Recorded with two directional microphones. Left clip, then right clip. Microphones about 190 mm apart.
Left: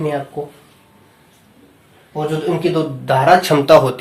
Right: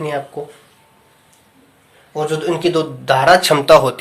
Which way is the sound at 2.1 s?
50° right (ahead or behind).